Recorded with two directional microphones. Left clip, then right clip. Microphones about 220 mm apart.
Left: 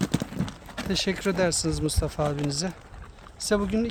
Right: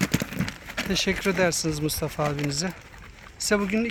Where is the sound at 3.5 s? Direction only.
5° left (ahead or behind).